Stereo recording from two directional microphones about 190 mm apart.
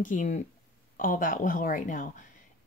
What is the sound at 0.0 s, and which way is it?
Speech, 40° left (ahead or behind).